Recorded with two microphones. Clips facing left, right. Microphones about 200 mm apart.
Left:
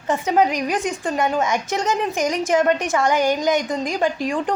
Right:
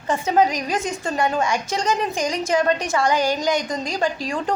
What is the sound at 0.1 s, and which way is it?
A woman's voice, 15° left (ahead or behind).